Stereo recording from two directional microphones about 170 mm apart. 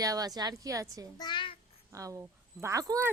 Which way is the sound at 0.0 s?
20° right (ahead or behind).